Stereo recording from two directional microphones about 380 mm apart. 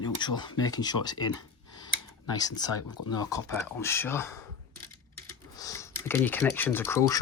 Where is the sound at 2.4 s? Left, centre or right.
Centre.